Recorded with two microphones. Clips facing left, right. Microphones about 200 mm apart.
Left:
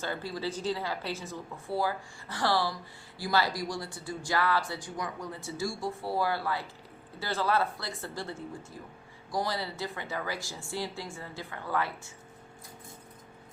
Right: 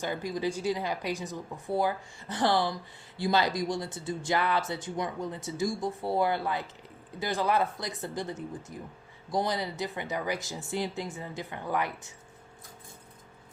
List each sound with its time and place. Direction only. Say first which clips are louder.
0.0 s speech: right 3 dB; 15° right (ahead or behind)